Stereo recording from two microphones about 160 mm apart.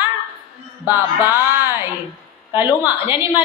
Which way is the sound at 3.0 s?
35° left (ahead or behind).